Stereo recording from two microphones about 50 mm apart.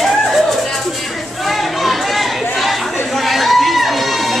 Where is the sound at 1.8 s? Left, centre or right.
Centre.